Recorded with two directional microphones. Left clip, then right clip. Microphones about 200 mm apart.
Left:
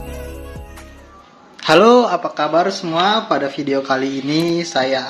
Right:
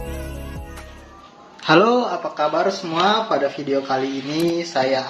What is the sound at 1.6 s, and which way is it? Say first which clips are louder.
Speech: left 5 dB; 40° left (ahead or behind).